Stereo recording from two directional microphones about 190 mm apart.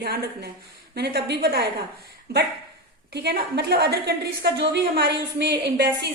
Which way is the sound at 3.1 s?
60° right (ahead or behind).